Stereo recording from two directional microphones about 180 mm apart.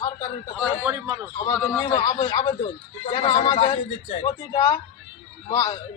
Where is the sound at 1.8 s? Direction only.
25° left (ahead or behind).